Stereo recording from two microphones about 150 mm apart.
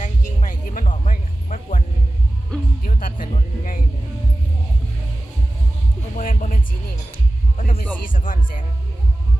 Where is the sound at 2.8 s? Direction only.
70° left (ahead or behind).